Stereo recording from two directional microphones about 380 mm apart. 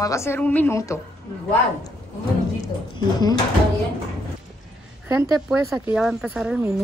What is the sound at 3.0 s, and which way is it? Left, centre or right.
Speech, centre.